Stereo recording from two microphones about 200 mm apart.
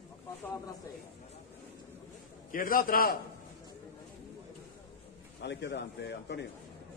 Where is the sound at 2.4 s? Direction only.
45° left (ahead or behind).